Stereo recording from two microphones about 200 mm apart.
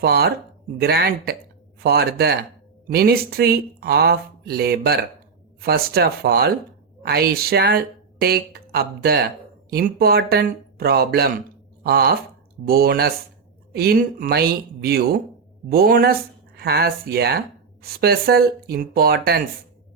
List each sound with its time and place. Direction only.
0.0 s a woman's voice: 50° right (ahead or behind)